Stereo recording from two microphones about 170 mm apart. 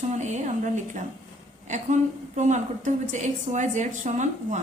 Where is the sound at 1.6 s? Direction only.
45° right (ahead or behind).